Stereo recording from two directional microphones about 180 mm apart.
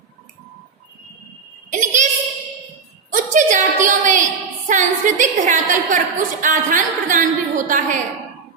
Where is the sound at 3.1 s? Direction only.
45° right (ahead or behind).